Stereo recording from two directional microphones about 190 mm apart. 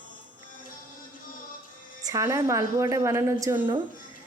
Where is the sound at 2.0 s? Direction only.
15° right (ahead or behind).